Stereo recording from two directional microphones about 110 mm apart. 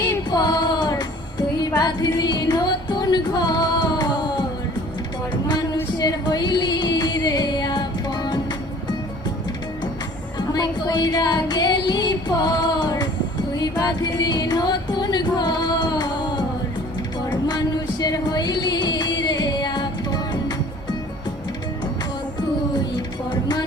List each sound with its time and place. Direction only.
0.3 s music: 35° left (ahead or behind)
6.0 s music: 35° left (ahead or behind)
10.3 s music: 40° left (ahead or behind)
18.0 s music: 35° left (ahead or behind)
23.0 s a sound: 40° left (ahead or behind)